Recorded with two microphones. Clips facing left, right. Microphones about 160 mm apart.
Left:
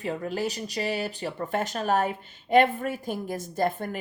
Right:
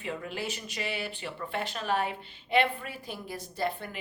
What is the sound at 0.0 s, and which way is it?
A woman's voice, 40° left (ahead or behind).